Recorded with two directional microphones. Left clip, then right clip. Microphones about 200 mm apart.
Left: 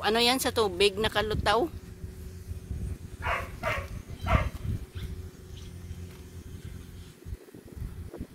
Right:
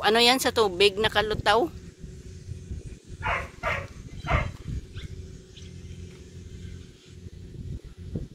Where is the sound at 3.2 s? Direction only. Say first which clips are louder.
Right 3 dB; 25° left (ahead or behind).